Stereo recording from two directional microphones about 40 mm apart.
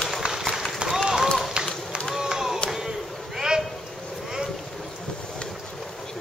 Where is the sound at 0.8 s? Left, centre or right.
Right.